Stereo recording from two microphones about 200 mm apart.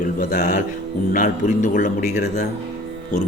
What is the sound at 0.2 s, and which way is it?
Speech, 45° left (ahead or behind).